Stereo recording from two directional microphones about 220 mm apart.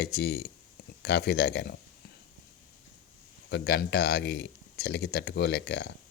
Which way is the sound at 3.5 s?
50° left (ahead or behind).